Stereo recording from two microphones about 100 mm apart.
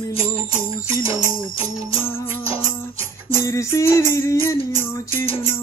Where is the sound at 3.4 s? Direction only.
30° left (ahead or behind).